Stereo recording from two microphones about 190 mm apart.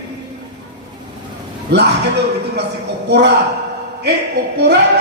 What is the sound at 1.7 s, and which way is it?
Speech, 60° right (ahead or behind).